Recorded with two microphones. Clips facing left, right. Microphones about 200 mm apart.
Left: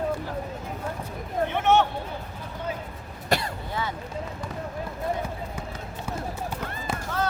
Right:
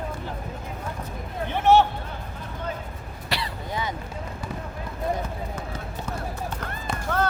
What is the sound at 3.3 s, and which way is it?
Throat clearing, 45° left (ahead or behind).